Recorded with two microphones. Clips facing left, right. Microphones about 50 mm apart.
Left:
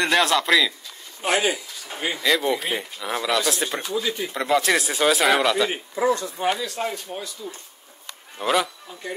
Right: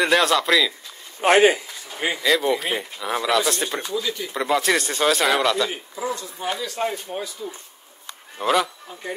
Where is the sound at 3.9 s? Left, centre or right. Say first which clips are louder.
Left 1 dB; left.